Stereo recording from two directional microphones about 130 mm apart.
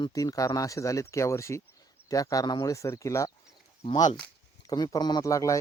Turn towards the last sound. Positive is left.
turn(degrees=25)  # may be behind; listen again after turning